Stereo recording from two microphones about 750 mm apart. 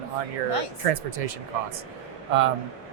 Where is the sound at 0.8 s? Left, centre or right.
Right.